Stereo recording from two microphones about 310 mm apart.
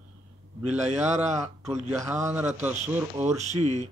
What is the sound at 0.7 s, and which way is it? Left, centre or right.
A man's voice, right.